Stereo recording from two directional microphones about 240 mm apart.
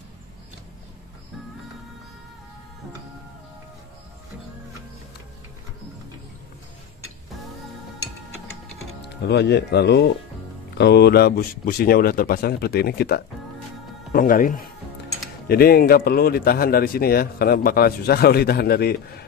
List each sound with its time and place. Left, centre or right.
9.0 s a man's voice: left